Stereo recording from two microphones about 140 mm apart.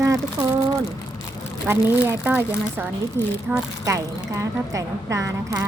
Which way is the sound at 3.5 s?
10° right (ahead or behind).